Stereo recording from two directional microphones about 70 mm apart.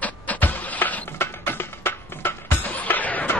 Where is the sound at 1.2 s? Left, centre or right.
Left.